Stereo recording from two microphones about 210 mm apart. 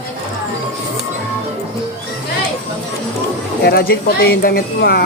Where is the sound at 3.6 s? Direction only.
45° left (ahead or behind).